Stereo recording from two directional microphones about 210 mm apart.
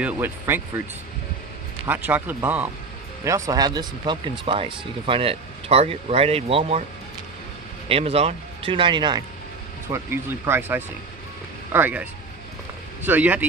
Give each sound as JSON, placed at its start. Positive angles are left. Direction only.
{"t": 0.0, "sound": "speech", "side_deg": -10}
{"t": 1.9, "sound": "speech", "side_deg": -10}
{"t": 7.9, "sound": "speech", "side_deg": -30}